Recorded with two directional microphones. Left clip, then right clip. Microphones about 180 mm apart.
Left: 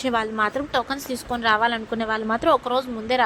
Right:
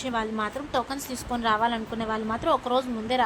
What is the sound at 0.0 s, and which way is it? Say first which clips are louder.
A woman's voice: left 6 dB; 30° left (ahead or behind).